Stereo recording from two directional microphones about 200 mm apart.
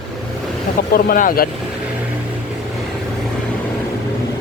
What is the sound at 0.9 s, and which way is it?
Speech, 45° left (ahead or behind).